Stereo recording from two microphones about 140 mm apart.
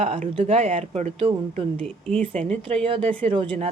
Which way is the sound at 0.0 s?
45° right (ahead or behind).